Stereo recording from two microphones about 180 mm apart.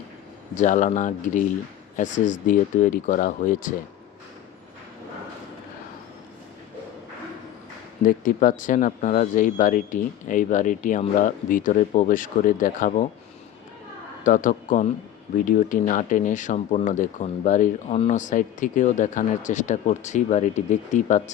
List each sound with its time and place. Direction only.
0.5 s speech: 45° left (ahead or behind)
8.0 s speech: 45° left (ahead or behind)
14.3 s a man's voice: 45° left (ahead or behind)